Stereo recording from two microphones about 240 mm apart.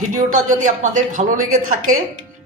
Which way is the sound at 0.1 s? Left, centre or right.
Right.